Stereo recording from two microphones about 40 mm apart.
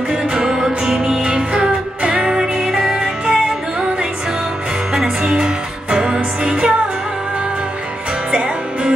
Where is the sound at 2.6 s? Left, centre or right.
Centre.